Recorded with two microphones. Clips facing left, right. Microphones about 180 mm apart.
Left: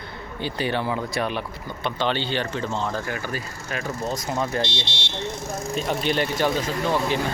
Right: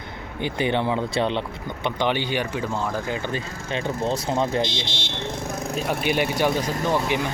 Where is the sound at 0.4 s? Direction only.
20° right (ahead or behind).